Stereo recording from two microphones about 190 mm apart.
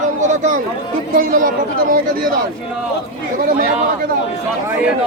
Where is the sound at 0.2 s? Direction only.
40° right (ahead or behind).